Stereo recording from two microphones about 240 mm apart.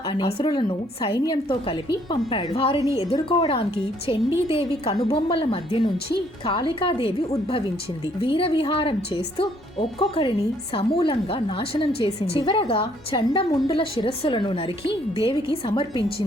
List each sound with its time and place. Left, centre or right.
0.1 s a woman's voice: left